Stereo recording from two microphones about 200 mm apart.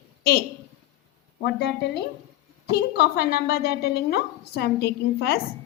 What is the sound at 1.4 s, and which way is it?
A woman's voice, 55° left (ahead or behind).